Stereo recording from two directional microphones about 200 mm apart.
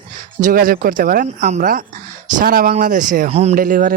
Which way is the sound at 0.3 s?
40° right (ahead or behind).